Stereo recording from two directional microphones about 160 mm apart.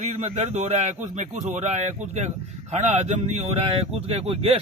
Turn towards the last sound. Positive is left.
turn(degrees=-35)  # may be behind; listen again after turning